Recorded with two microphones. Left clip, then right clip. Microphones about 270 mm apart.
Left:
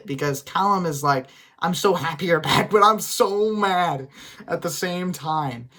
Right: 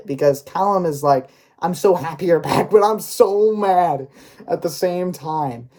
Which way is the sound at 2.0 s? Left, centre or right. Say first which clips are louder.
Right 3 dB; left.